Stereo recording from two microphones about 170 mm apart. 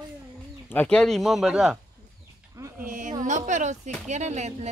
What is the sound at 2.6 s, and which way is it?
Speech, 15° right (ahead or behind).